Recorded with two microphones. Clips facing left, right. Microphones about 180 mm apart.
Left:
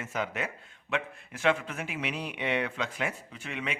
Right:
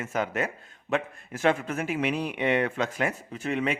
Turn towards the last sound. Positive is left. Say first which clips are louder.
# right 9 dB
turn(degrees=-40)  # may be behind; listen again after turning